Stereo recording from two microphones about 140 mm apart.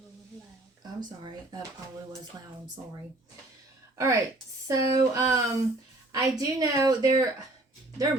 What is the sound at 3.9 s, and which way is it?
A woman's voice, 20° right (ahead or behind).